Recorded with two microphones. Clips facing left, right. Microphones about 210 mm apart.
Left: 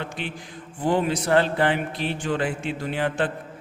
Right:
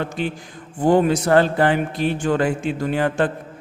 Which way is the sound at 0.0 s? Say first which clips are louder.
Right 7 dB; 40° right (ahead or behind).